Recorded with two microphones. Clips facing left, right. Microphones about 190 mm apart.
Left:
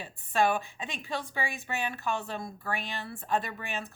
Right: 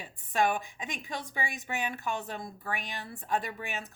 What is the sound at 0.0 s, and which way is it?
A woman's voice, 15° right (ahead or behind).